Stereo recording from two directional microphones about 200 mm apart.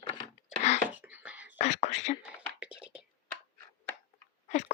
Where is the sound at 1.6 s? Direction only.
35° left (ahead or behind).